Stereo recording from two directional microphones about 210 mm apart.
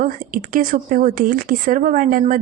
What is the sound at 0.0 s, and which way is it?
A woman's voice, 40° right (ahead or behind).